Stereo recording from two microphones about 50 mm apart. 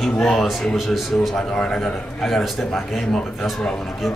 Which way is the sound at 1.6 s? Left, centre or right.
Centre.